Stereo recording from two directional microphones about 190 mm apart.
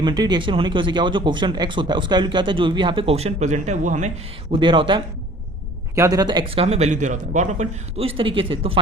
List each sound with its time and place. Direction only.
0.0 s speech: 25° right (ahead or behind); by 4.1 s 40° right (ahead or behind)
4.5 s speech: 25° right (ahead or behind)